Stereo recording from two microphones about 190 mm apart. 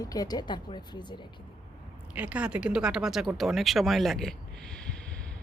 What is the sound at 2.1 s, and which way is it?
Speech, 5° right (ahead or behind).